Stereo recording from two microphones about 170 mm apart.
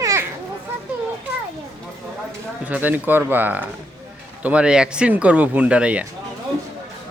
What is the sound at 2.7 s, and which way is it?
Speech, 10° right (ahead or behind).